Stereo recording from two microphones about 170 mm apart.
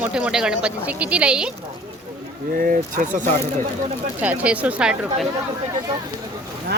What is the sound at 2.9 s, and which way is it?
Speech, 50° right (ahead or behind).